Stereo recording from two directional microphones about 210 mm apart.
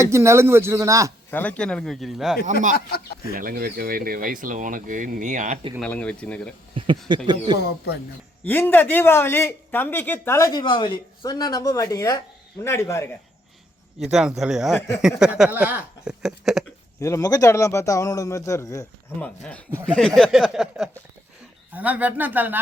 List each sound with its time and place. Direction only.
0.0 s speech: 15° right (ahead or behind)
1.3 s speech: 5° left (ahead or behind)
2.5 s speech: 35° right (ahead or behind)
2.7 s speech: 45° left (ahead or behind)
3.3 s speech: 45° right (ahead or behind)
5.8 s speech: 5° left (ahead or behind)
6.7 s speech: 25° right (ahead or behind)
8.4 s speech: 10° left (ahead or behind)
14.0 s speech: centre (ahead or behind)
14.8 s speech: 15° left (ahead or behind)
15.0 s speech: 5° right (ahead or behind)
17.0 s speech: 15° left (ahead or behind); by 22.6 s 10° right (ahead or behind)